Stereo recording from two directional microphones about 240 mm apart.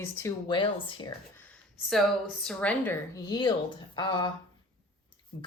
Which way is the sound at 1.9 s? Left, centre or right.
Centre.